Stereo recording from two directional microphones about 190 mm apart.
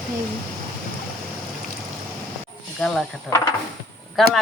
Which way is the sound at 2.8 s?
5° left (ahead or behind).